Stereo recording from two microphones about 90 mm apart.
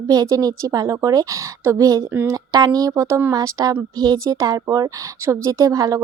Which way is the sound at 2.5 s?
45° right (ahead or behind).